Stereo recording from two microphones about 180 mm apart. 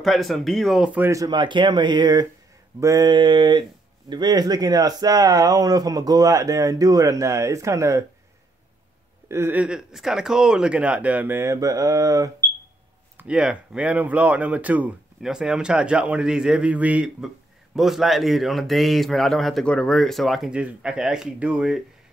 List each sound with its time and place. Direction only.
0.0 s speech: centre (ahead or behind); by 8.0 s 15° right (ahead or behind)
9.3 s speech: 10° right (ahead or behind)
13.2 s speech: 5° right (ahead or behind)